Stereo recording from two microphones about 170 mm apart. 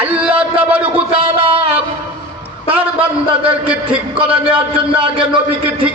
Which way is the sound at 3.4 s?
5° right (ahead or behind).